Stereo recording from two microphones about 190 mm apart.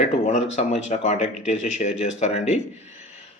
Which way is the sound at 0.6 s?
35° left (ahead or behind).